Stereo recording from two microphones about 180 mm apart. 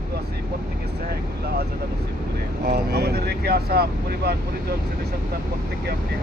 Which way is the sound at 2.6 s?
60° right (ahead or behind).